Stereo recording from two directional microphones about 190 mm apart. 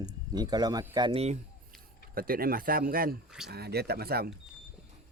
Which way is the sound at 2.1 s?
50° right (ahead or behind).